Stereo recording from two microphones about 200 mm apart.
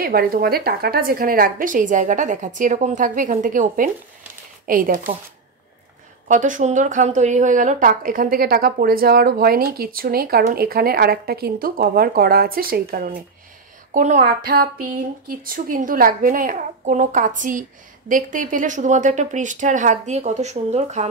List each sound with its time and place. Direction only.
0.0 s speech: 50° right (ahead or behind)
6.2 s speech: 40° right (ahead or behind)